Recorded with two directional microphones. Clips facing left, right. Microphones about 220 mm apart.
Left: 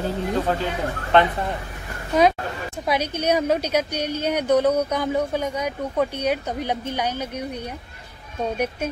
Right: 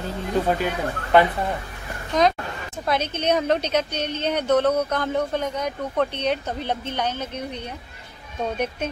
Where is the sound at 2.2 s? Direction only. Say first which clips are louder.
Left 2 dB; 10° left (ahead or behind).